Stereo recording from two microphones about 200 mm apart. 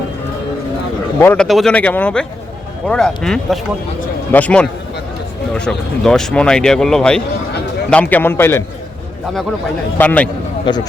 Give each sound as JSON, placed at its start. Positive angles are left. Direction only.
{"t": 1.2, "sound": "a man's voice", "side_deg": 5}
{"t": 10.0, "sound": "a man's voice", "side_deg": 5}
{"t": 10.7, "sound": "speech", "side_deg": 20}